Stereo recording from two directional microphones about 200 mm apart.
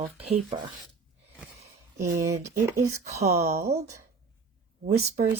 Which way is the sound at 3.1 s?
35° right (ahead or behind).